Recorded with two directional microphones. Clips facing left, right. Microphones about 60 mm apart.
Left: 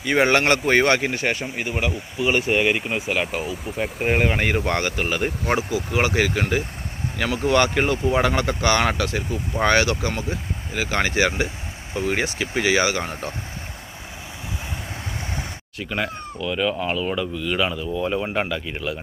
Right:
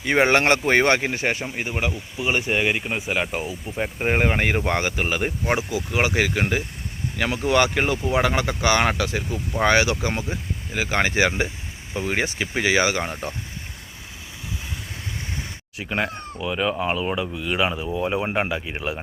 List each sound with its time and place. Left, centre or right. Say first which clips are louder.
0.0 s speech: even; right; by 6.4 s centre
7.4 s speech: left 1 dB; centre; by 13.3 s right
15.8 s speech: right 1 dB; right